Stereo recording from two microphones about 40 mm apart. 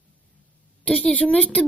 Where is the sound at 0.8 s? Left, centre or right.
Left.